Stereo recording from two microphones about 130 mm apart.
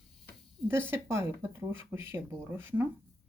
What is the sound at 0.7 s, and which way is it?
Speech, 20° right (ahead or behind).